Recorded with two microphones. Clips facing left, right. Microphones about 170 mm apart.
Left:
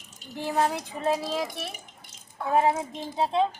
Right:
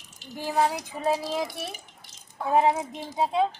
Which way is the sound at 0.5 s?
Centre (ahead or behind).